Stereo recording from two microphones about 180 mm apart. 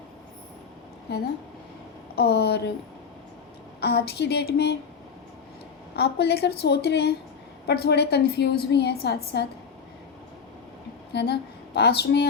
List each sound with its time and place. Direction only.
1.1 s a woman's voice: 65° left (ahead or behind)
3.8 s a woman's voice: 65° left (ahead or behind)
6.0 s a woman's voice: 65° left (ahead or behind)
11.1 s speech: 65° left (ahead or behind)